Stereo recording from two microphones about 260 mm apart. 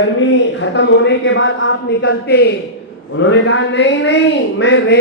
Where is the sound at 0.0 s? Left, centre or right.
Left.